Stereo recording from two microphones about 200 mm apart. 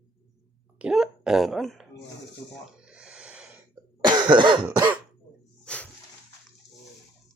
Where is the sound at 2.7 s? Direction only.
5° right (ahead or behind).